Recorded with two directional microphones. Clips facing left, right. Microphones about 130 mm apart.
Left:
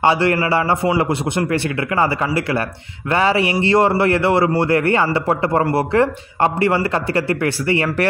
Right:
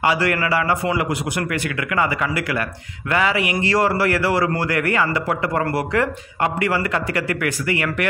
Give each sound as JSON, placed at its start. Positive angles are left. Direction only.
{"t": 0.0, "sound": "speech", "side_deg": 30}